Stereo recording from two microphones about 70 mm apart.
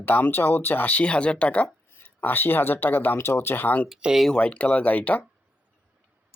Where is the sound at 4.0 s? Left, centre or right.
Centre.